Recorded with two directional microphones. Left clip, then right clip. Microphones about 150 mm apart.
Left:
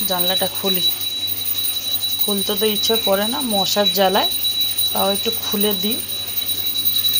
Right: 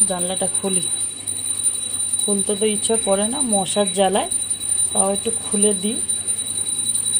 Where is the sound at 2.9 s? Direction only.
20° right (ahead or behind).